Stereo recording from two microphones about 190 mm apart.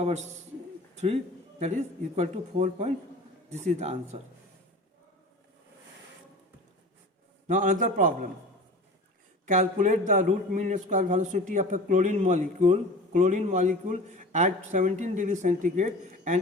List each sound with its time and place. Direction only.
0.0 s a man's voice: 35° right (ahead or behind)
7.4 s a man's voice: 45° right (ahead or behind)
9.5 s a man's voice: 40° right (ahead or behind)